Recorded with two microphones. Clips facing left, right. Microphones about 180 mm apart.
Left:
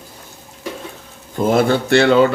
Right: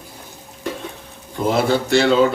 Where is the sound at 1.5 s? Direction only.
60° left (ahead or behind).